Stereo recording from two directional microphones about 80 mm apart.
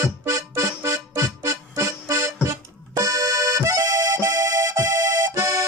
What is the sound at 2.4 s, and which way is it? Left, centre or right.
Accordion, right.